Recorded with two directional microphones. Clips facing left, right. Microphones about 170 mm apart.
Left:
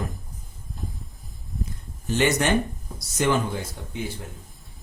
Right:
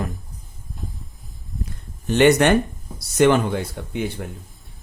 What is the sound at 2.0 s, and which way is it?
Speech, 65° right (ahead or behind).